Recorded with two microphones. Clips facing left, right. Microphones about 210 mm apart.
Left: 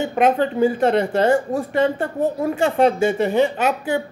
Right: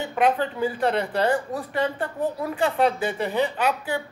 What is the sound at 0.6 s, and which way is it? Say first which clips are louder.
Speech: left 7 dB; 25° left (ahead or behind).